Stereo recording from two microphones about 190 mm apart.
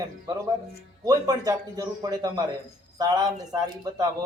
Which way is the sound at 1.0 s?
20° right (ahead or behind).